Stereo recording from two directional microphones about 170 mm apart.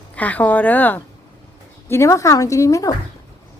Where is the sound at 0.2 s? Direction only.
10° left (ahead or behind).